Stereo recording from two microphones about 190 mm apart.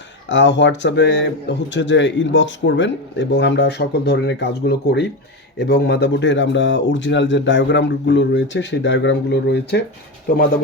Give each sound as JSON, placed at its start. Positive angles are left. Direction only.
{"t": 0.3, "sound": "a man's voice", "side_deg": 75}
{"t": 10.2, "sound": "speech", "side_deg": 50}